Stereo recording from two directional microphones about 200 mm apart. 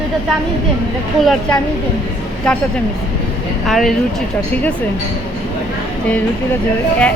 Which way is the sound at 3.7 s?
Centre (ahead or behind).